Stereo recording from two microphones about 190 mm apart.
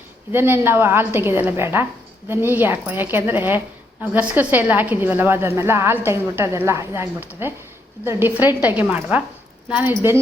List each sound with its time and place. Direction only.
0.3 s a woman's voice: 10° right (ahead or behind)